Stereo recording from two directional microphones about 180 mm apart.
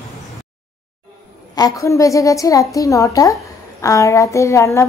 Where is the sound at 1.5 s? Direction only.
20° left (ahead or behind).